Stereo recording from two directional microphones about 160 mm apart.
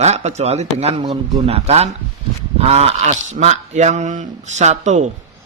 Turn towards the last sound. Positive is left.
turn(degrees=-45)  # may be behind; listen again after turning